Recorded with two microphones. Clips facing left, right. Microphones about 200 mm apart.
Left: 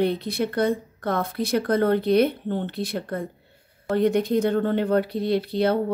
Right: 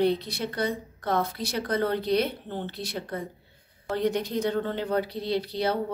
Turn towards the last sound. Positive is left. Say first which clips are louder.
# left 5 dB
turn(degrees=55)  # may be behind; listen again after turning